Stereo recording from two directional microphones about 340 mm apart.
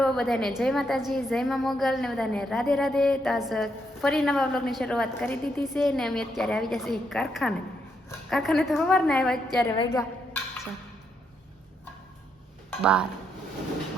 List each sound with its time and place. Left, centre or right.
0.0 s a woman's voice: centre
9.7 s a sound: centre
12.8 s a woman's voice: centre